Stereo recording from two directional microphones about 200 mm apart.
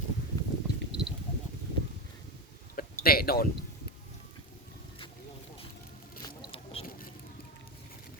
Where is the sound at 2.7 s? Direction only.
45° left (ahead or behind).